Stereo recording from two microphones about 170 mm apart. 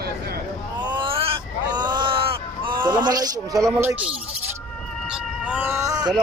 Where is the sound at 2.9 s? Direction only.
25° right (ahead or behind).